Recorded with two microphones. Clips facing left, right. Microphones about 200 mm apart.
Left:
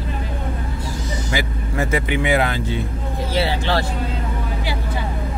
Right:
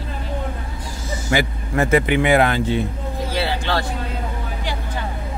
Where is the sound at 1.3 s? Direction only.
55° right (ahead or behind).